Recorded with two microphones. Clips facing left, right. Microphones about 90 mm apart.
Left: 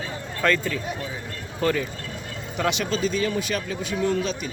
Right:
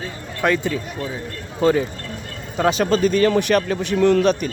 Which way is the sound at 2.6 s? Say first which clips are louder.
Right 7 dB; 35° right (ahead or behind).